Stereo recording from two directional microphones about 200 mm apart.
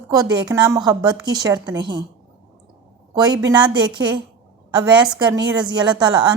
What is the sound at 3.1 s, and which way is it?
A woman's voice, 20° right (ahead or behind).